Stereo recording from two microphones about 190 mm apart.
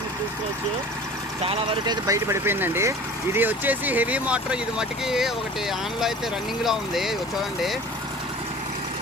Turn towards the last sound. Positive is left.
turn(degrees=0)  # may be behind; listen again after turning